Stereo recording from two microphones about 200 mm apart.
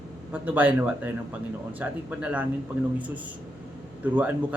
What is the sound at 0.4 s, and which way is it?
Speech, 10° right (ahead or behind).